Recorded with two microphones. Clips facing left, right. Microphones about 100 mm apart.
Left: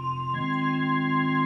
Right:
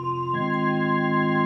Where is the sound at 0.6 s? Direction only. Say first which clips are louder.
Right 2 dB; 15° right (ahead or behind).